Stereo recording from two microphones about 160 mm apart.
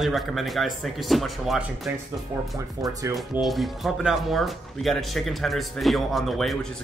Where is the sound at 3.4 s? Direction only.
Centre (ahead or behind).